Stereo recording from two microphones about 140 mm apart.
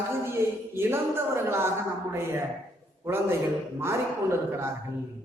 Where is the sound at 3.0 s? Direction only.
20° right (ahead or behind).